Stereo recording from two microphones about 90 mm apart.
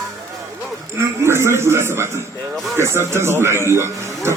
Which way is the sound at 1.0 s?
30° right (ahead or behind).